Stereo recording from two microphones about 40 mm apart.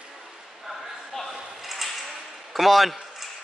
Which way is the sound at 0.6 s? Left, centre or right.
Centre.